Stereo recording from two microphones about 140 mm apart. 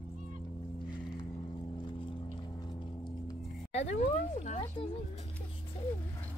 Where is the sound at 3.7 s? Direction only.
50° left (ahead or behind).